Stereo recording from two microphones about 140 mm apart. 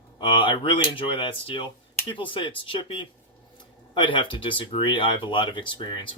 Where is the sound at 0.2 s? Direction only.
35° left (ahead or behind).